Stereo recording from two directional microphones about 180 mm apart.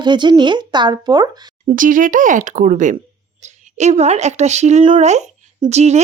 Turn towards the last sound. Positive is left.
turn(degrees=-40)  # may be behind; listen again after turning